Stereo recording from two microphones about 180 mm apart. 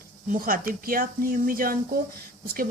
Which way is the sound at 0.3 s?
50° right (ahead or behind).